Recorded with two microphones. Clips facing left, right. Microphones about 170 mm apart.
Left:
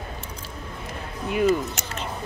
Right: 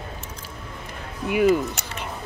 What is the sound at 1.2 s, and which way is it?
Speech, 10° right (ahead or behind).